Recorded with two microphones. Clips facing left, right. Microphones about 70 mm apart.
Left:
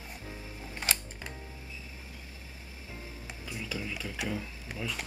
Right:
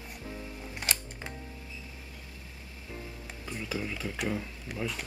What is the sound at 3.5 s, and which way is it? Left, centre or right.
Stir, right.